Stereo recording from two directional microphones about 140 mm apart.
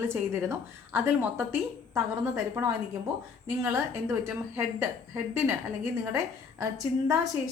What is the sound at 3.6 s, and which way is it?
A woman's voice, 20° right (ahead or behind).